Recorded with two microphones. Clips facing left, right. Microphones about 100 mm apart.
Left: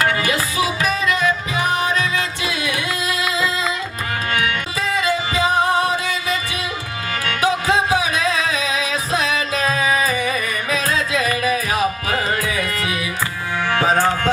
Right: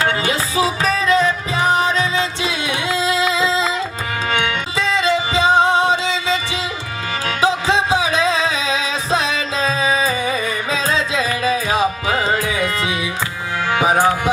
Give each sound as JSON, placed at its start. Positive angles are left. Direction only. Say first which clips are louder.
{"t": 0.0, "sound": "music", "louder": "even", "side_deg": -25}